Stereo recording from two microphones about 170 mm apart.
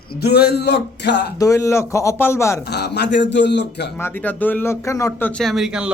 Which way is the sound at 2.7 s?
75° left (ahead or behind).